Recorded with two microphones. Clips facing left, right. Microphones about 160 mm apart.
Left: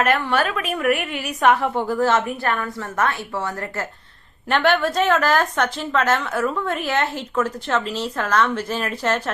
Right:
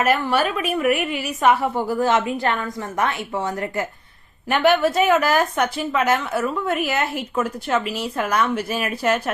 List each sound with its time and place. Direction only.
0.0 s a woman's voice: 5° right (ahead or behind)